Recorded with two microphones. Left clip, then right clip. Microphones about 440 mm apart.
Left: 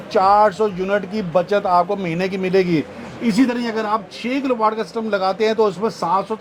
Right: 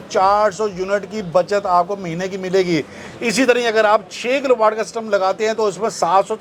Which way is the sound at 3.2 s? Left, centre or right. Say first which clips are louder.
Right 5 dB; right.